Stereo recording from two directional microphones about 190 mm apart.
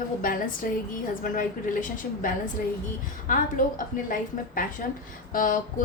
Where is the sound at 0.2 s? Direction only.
45° left (ahead or behind).